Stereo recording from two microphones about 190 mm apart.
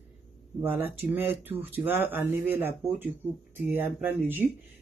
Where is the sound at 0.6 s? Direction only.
10° right (ahead or behind).